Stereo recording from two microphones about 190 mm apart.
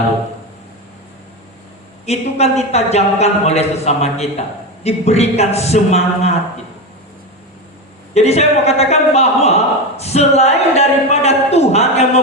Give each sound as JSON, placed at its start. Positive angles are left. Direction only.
{"t": 2.0, "sound": "speech", "side_deg": 35}
{"t": 8.1, "sound": "speech", "side_deg": 35}